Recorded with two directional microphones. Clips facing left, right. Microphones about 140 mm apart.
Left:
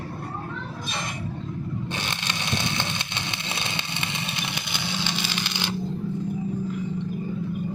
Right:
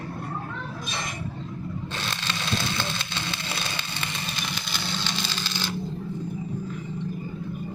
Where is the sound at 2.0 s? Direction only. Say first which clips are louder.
Left 1 dB; 15° left (ahead or behind).